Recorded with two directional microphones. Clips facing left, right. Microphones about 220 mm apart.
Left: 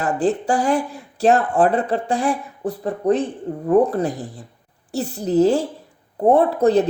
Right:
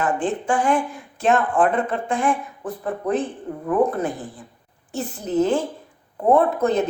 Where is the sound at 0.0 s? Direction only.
40° left (ahead or behind).